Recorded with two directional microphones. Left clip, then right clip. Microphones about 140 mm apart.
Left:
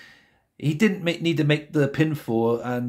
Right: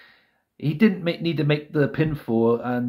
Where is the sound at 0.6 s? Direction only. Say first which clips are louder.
Right 1 dB; 20° left (ahead or behind).